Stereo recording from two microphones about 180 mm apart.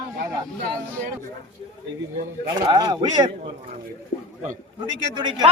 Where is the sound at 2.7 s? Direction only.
20° right (ahead or behind).